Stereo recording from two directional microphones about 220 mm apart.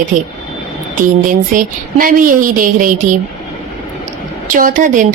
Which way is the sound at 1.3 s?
40° right (ahead or behind).